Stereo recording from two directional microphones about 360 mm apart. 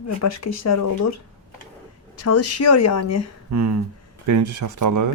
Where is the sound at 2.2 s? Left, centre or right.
Left.